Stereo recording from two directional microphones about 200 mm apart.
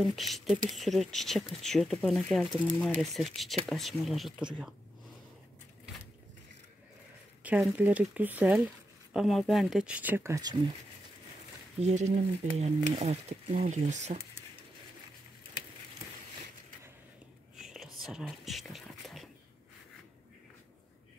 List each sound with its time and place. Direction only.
0.0 s speech: centre (ahead or behind)
7.4 s speech: 5° right (ahead or behind)
11.8 s speech: 35° right (ahead or behind)
17.6 s whispering: centre (ahead or behind)